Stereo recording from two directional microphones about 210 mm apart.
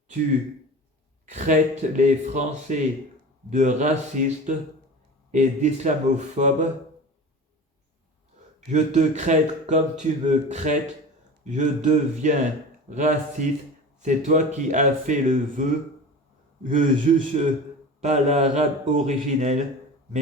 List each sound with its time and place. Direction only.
1.3 s speech: 35° right (ahead or behind)
8.7 s speech: 35° right (ahead or behind)
16.7 s speech: 40° right (ahead or behind)